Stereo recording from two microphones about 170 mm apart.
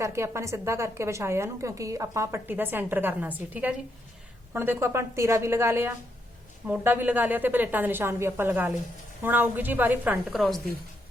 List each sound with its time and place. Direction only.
0.0 s a woman's voice: 15° right (ahead or behind); by 10.6 s centre (ahead or behind)